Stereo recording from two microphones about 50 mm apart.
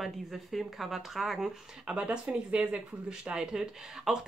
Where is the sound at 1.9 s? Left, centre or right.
Right.